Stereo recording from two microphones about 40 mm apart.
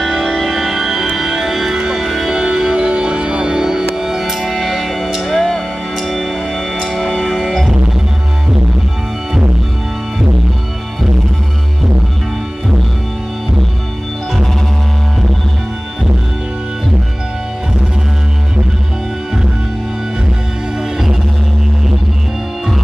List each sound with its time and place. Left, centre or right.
0.3 s music: centre; by 3.6 s right
3.6 s music: centre
5.4 s music: centre